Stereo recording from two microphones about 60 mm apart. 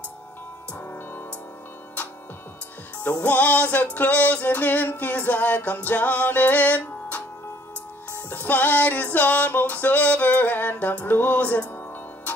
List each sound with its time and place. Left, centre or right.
2.0 s music: left
8.3 s music: left